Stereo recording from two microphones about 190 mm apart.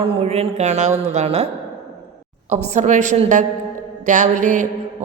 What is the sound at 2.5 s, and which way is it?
A woman's voice, 35° right (ahead or behind).